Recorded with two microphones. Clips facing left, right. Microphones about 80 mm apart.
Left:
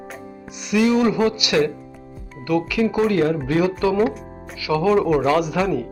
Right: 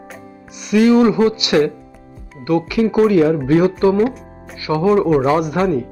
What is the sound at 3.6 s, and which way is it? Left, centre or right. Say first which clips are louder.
Speech: right 5 dB; right.